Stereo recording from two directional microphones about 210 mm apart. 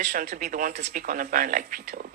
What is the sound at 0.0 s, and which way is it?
A woman's voice, 45° right (ahead or behind).